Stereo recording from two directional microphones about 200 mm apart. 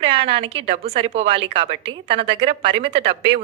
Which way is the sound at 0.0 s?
25° right (ahead or behind).